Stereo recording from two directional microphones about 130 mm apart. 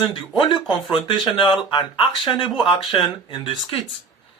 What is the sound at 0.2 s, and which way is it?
Speech, 40° left (ahead or behind).